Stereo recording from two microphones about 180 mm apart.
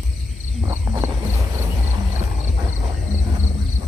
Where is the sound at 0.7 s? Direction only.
15° right (ahead or behind).